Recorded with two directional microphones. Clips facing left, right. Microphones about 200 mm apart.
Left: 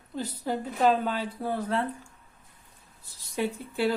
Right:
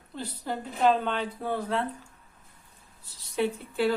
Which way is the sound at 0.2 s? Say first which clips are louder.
Left 3 dB; 5° left (ahead or behind).